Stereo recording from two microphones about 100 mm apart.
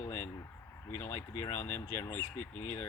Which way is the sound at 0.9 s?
25° left (ahead or behind).